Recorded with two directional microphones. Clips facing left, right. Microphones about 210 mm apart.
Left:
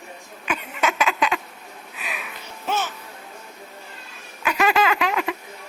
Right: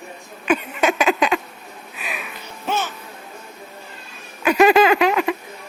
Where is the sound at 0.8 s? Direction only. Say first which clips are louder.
Right 3 dB; 15° right (ahead or behind).